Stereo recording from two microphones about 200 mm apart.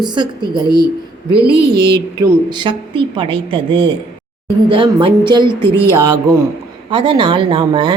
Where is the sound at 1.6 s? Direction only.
55° right (ahead or behind).